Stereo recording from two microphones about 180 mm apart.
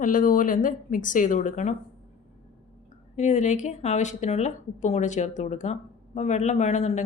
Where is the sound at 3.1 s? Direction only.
40° left (ahead or behind).